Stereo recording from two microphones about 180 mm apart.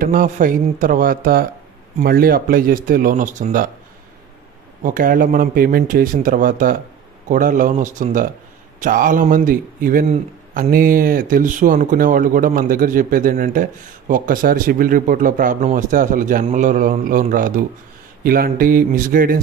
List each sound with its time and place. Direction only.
0.0 s a man's voice: 50° right (ahead or behind)
4.8 s a man's voice: 50° right (ahead or behind)